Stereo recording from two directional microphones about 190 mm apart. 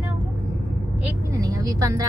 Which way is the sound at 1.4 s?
20° right (ahead or behind).